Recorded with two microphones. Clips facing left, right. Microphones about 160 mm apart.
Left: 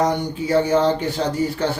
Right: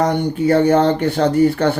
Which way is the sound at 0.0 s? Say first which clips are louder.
Right 4 dB; 60° right (ahead or behind).